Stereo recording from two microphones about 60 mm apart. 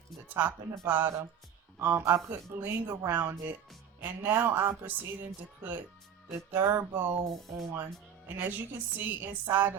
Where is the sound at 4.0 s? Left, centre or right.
Right.